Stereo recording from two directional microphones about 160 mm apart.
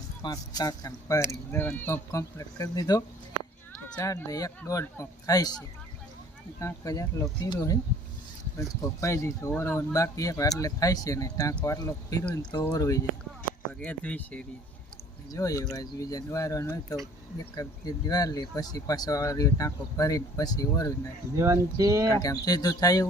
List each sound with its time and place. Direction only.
0.2 s speech: 25° left (ahead or behind)
6.6 s speech: 20° left (ahead or behind)
13.7 s speech: 10° left (ahead or behind)
15.3 s speech: 20° left (ahead or behind)
21.3 s speech: 20° right (ahead or behind)
22.2 s speech: 25° left (ahead or behind)